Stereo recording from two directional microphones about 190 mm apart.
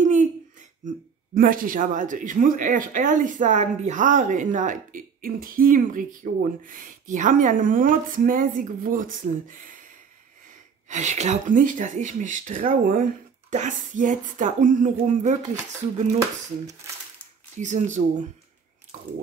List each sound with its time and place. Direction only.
0.0 s speech: 40° right (ahead or behind)
17.6 s speech: 40° right (ahead or behind)